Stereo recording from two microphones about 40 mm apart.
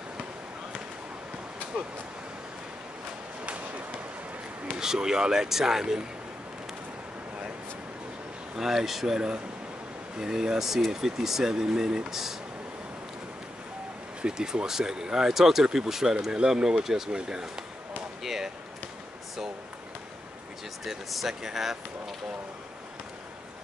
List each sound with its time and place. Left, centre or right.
3.4 s a sound: right
4.7 s speech: centre
8.5 s speech: centre
14.2 s speech: centre
20.8 s speech: centre